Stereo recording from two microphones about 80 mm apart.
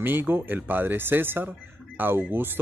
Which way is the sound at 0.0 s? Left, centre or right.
Right.